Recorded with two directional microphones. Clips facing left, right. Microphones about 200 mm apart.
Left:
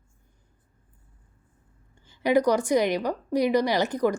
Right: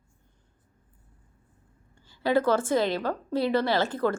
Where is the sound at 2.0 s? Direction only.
20° left (ahead or behind).